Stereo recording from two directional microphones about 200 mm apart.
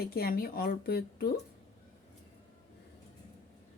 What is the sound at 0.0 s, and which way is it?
Speech, 50° left (ahead or behind).